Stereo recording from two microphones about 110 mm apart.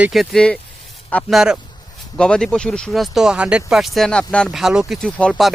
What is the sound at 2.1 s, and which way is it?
Speech, 10° left (ahead or behind).